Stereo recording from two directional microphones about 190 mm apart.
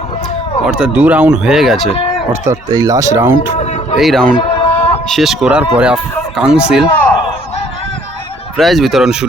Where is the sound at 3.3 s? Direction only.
25° left (ahead or behind).